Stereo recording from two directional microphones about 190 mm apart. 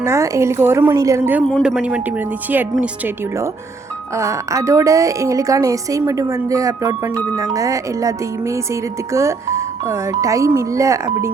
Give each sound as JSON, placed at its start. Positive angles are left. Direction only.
{"t": 0.0, "sound": "speech", "side_deg": -15}
{"t": 1.5, "sound": "speech", "side_deg": 0}
{"t": 4.1, "sound": "speech", "side_deg": -15}